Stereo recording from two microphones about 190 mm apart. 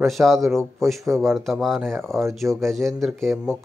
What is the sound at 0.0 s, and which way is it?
Speech, centre (ahead or behind).